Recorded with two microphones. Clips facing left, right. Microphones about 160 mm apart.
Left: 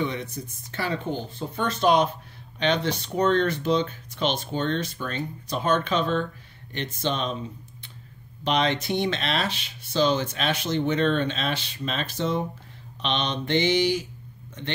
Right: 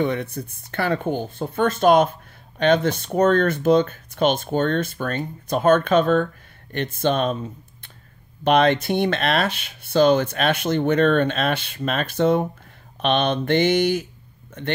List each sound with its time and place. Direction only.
0.0 s speech: 55° right (ahead or behind)
8.5 s speech: 55° right (ahead or behind)